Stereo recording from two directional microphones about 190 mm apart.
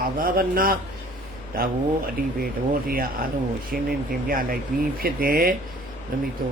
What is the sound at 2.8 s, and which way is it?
Speech, 50° right (ahead or behind).